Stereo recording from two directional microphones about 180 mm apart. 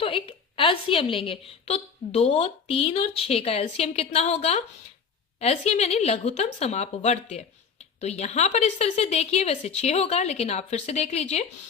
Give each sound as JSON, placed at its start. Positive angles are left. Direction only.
{"t": 0.0, "sound": "a woman's voice", "side_deg": 30}